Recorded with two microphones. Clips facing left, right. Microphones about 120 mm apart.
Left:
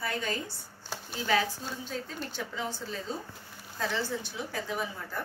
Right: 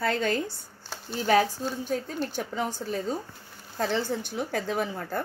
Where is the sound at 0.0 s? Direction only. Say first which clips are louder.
Right 7 dB; 70° right (ahead or behind).